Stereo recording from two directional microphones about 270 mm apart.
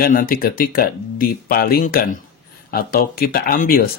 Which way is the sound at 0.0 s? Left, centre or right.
Left.